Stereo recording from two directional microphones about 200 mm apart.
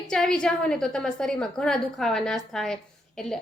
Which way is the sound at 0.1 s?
5° left (ahead or behind).